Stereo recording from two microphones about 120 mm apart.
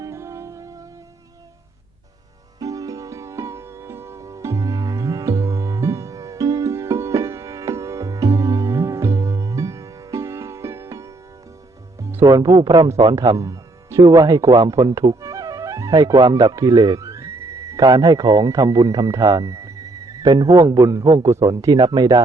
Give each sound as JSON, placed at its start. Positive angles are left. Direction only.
{"t": 0.0, "sound": "music", "side_deg": -25}
{"t": 2.6, "sound": "music", "side_deg": -30}
{"t": 12.0, "sound": "speech", "side_deg": -25}
{"t": 13.1, "sound": "speech", "side_deg": -25}